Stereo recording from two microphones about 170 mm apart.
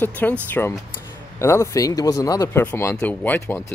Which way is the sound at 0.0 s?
10° left (ahead or behind).